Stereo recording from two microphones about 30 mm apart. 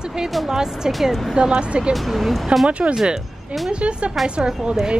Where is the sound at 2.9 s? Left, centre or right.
Centre.